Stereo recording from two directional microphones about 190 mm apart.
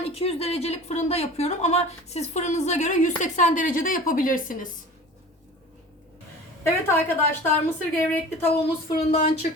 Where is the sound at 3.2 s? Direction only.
40° left (ahead or behind).